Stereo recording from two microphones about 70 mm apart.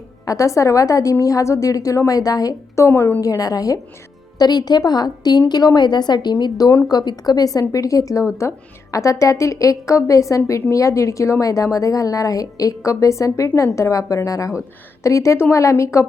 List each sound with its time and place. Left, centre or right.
0.3 s a woman's voice: left
2.7 s a woman's voice: left
3.2 s a woman's voice: left
4.4 s a woman's voice: left
6.8 s a woman's voice: left